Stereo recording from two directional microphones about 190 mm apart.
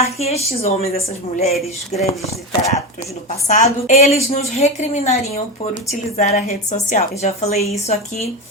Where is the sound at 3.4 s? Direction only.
35° left (ahead or behind).